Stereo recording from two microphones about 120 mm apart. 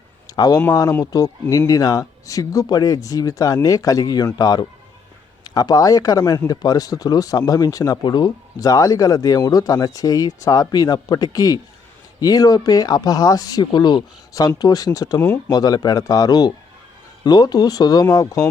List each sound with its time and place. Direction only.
0.3 s speech: 30° left (ahead or behind)